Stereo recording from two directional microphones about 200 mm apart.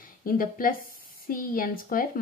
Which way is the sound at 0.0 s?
45° left (ahead or behind).